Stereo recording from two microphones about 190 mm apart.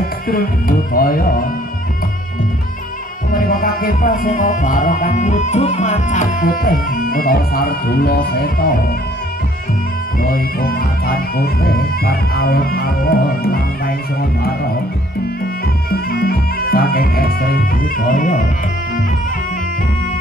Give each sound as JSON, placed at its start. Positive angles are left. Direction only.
{"t": 0.0, "sound": "music", "side_deg": 50}
{"t": 3.3, "sound": "music", "side_deg": 50}
{"t": 10.2, "sound": "music", "side_deg": 50}
{"t": 15.9, "sound": "speech", "side_deg": 50}